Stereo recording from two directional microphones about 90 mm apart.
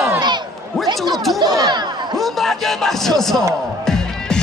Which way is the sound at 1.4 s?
45° right (ahead or behind).